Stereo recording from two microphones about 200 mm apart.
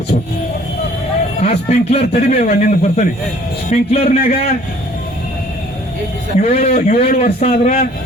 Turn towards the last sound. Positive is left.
turn(degrees=35)  # may be behind; listen again after turning